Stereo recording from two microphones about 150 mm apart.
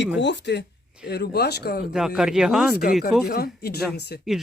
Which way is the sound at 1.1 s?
90° left.